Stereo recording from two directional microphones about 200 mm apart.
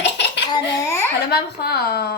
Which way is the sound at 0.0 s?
60° left (ahead or behind).